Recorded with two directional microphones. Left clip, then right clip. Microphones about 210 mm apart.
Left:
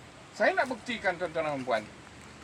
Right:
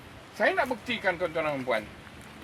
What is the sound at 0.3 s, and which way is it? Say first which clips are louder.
Speech: right 1 dB; 10° right (ahead or behind).